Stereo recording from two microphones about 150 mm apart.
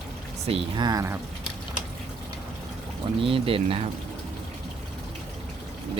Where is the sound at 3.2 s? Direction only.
35° right (ahead or behind).